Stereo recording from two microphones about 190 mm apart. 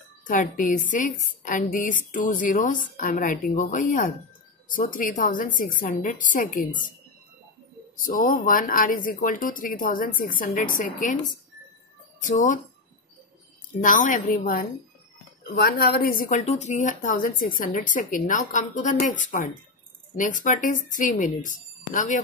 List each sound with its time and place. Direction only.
0.3 s speech: 45° left (ahead or behind)
8.0 s speech: 50° left (ahead or behind)
12.2 s speech: 40° left (ahead or behind)
13.7 s speech: 45° left (ahead or behind)